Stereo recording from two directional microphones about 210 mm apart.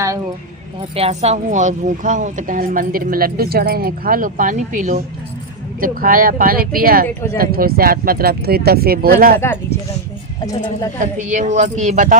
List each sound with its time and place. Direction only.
0.9 s a woman's voice: 30° right (ahead or behind)
9.4 s speech: 10° left (ahead or behind)
11.0 s a woman's voice: 35° right (ahead or behind)